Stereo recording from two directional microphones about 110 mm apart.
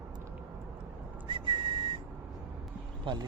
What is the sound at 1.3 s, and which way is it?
Whistling, 50° right (ahead or behind).